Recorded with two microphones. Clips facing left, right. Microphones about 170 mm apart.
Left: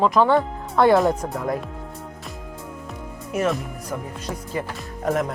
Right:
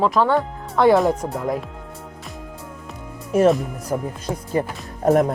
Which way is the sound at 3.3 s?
30° right (ahead or behind).